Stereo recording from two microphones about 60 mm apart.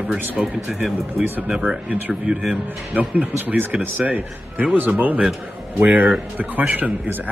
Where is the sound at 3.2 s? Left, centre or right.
Right.